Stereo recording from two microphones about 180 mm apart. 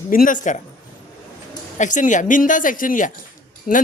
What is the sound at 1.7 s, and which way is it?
Speech, 45° left (ahead or behind).